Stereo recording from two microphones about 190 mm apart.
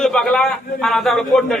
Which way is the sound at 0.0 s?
5° left (ahead or behind).